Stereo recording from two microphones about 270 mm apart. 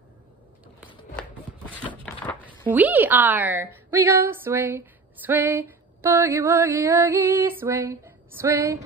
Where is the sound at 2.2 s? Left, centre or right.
Centre.